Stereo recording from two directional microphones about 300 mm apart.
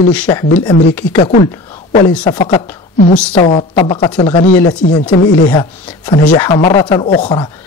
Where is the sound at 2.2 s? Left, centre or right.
Centre.